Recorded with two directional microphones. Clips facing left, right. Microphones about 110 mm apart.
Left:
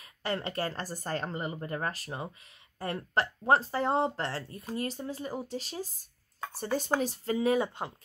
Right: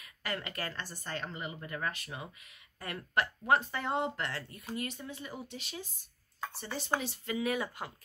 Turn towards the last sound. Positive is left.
turn(degrees=25)  # may be behind; listen again after turning